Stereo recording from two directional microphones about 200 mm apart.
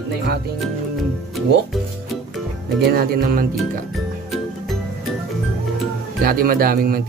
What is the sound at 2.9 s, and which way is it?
Speech, 45° right (ahead or behind).